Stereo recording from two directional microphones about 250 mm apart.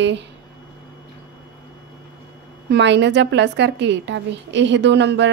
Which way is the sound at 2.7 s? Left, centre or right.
Right.